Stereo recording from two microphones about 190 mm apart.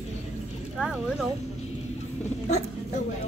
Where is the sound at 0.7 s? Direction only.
5° right (ahead or behind).